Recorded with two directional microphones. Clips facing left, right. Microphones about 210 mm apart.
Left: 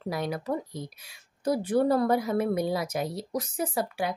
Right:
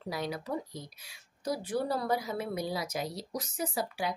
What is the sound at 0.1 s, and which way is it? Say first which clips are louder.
Speech: left 4 dB; 55° left (ahead or behind).